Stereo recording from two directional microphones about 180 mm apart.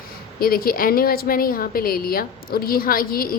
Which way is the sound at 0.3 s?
55° left (ahead or behind).